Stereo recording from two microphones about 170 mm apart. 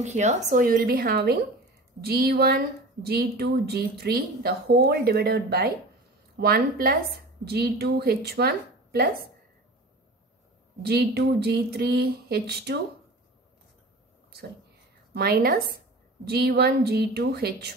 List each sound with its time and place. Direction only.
0.0 s a woman's voice: 40° right (ahead or behind); by 9.1 s 65° right (ahead or behind)
10.8 s a woman's voice: 70° right (ahead or behind)
15.1 s a woman's voice: 65° right (ahead or behind)